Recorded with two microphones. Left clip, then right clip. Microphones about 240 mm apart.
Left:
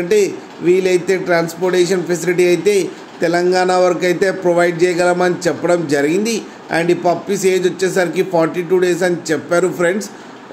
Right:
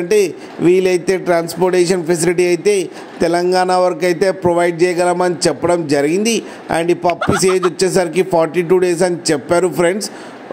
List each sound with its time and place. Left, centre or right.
0.1 s a man's voice: right